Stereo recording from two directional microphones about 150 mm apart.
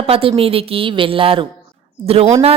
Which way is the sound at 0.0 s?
40° right (ahead or behind).